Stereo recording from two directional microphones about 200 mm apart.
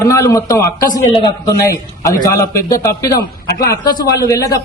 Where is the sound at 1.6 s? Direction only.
15° left (ahead or behind).